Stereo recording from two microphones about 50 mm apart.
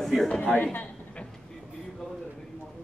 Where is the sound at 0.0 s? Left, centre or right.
Centre.